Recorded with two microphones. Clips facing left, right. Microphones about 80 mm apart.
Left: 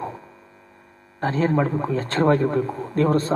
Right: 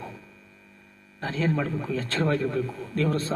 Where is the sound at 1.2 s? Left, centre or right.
Left.